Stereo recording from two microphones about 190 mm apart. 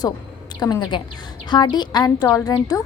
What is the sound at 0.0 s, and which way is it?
A woman's voice, 20° left (ahead or behind).